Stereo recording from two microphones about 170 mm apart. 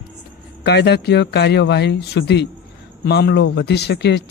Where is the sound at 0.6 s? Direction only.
75° left (ahead or behind).